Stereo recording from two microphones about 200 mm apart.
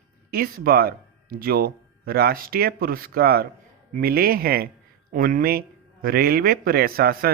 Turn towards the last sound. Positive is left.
turn(degrees=-50)  # may be behind; listen again after turning